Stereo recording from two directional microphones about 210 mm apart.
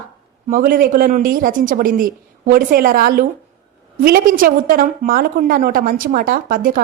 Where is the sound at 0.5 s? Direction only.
45° right (ahead or behind).